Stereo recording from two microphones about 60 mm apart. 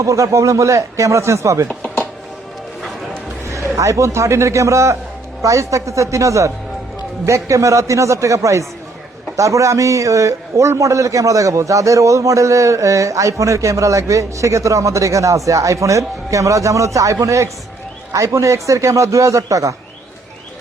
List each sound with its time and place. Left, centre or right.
0.0 s a man's voice: right
3.4 s a man's voice: right